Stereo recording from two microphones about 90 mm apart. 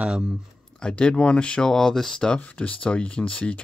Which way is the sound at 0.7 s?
10° left (ahead or behind).